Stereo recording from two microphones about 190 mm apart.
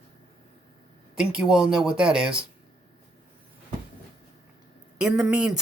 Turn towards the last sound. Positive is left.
turn(degrees=-5)  # may be behind; listen again after turning